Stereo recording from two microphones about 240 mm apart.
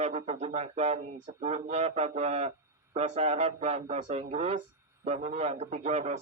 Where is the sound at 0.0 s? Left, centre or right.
Right.